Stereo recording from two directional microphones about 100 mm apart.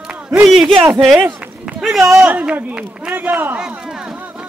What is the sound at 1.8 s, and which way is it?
A man's voice, 5° right (ahead or behind).